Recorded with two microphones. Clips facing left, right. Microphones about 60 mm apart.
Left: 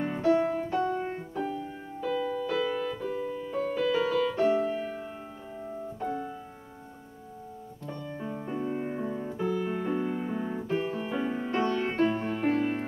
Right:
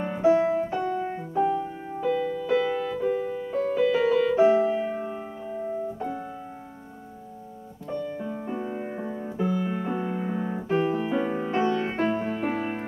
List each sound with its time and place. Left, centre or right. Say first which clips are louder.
0.0 s music: right 4 dB; centre
1.3 s keyboard: right 9 dB; centre
2.3 s music: right 4 dB; centre
3.1 s music: right 6 dB; right
3.5 s music: right 5 dB; centre
3.9 s music: right 5 dB; right
4.5 s music: right 5 dB; centre
4.8 s piano: right 7 dB; right
8.3 s music: right 1 dB; centre